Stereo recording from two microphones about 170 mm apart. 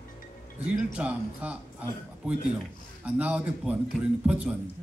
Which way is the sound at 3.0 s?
10° right (ahead or behind).